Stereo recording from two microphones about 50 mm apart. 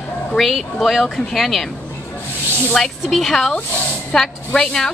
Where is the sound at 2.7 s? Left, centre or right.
Centre.